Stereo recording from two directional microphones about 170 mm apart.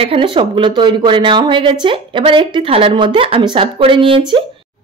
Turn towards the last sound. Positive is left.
turn(degrees=-30)  # may be behind; listen again after turning